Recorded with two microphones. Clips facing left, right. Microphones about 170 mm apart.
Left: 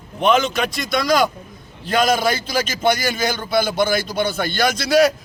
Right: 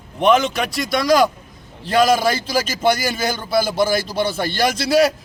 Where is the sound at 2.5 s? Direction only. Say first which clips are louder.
Right 1 dB; 35° right (ahead or behind).